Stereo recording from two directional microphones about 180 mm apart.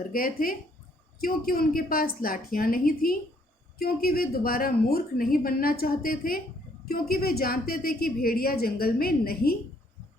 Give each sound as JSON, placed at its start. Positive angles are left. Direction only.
{"t": 0.1, "sound": "a woman's voice", "side_deg": 55}